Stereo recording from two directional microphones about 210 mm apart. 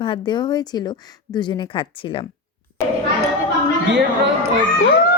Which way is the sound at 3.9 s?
55° right (ahead or behind).